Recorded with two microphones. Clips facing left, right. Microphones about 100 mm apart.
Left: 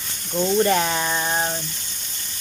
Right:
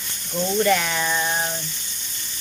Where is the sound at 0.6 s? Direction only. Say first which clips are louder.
Left 1 dB; 30° left (ahead or behind).